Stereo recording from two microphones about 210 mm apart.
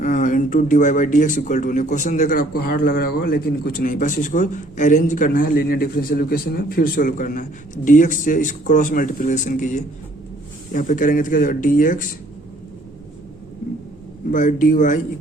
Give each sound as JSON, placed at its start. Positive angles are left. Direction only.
{"t": 0.0, "sound": "speech", "side_deg": 35}
{"t": 14.3, "sound": "speech", "side_deg": 40}